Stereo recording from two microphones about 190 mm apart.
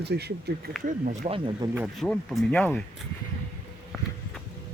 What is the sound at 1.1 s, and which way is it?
Speech, 30° right (ahead or behind).